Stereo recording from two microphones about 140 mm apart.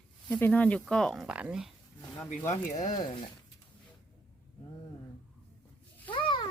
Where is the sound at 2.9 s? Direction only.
35° left (ahead or behind).